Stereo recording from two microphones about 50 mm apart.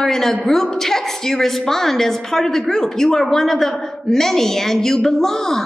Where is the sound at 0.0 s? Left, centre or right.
Centre.